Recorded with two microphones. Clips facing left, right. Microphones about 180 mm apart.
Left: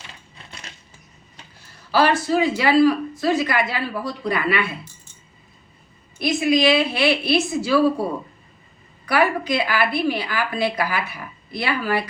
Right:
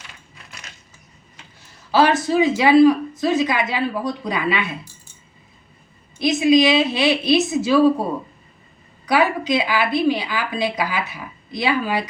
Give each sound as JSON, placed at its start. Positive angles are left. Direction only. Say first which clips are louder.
{"t": 0.1, "sound": "coin", "louder": "left 1 dB", "side_deg": 30}
{"t": 1.9, "sound": "speech", "louder": "right 2 dB", "side_deg": -20}
{"t": 6.1, "sound": "speech", "louder": "right 4 dB", "side_deg": -20}
{"t": 9.0, "sound": "speech", "louder": "right 1 dB", "side_deg": -20}